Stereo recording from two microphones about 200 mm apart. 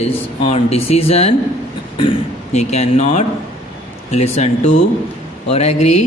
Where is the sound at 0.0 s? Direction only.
30° left (ahead or behind).